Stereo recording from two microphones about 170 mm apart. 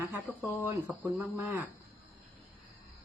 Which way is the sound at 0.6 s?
10° right (ahead or behind).